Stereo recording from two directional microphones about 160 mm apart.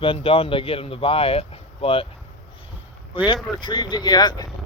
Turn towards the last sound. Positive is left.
turn(degrees=25)  # may be behind; listen again after turning